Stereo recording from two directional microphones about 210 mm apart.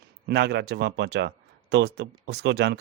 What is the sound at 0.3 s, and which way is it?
Speech, 50° right (ahead or behind).